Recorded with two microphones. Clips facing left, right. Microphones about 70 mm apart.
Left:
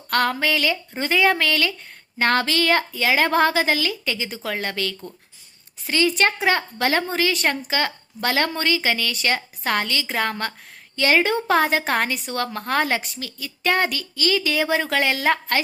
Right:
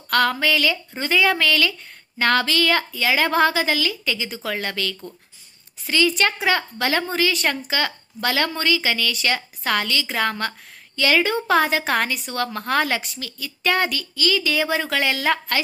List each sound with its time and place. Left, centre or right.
0.1 s a woman's voice: left